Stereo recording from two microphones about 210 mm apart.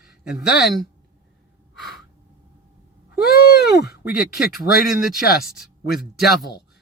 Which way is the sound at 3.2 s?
50° left (ahead or behind).